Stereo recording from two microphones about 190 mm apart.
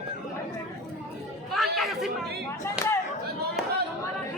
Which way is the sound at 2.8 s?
5° right (ahead or behind).